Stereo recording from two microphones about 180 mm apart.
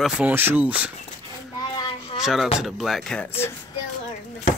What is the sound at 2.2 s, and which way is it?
Speech, centre (ahead or behind).